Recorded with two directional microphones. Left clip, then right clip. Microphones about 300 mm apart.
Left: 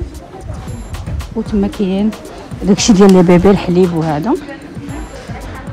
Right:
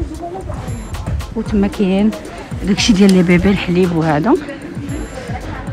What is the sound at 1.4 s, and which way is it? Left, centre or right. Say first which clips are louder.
Speech: even; centre.